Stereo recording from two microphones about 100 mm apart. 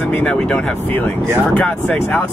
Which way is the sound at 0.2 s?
10° left (ahead or behind).